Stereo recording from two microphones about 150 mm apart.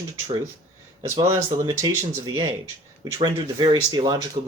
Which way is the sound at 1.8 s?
25° right (ahead or behind).